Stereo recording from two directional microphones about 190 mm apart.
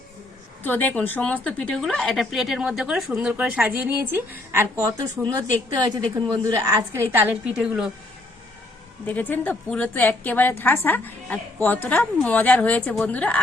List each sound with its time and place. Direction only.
0.6 s a woman's voice: 10° left (ahead or behind); by 5.2 s 15° right (ahead or behind)
5.2 s a woman's voice: 10° left (ahead or behind)
5.8 s a woman's voice: 20° right (ahead or behind); by 7.9 s 5° right (ahead or behind)
9.0 s a woman's voice: 10° left (ahead or behind)